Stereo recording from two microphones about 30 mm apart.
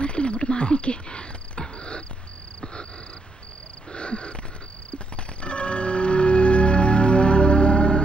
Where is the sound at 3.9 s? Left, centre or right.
Left.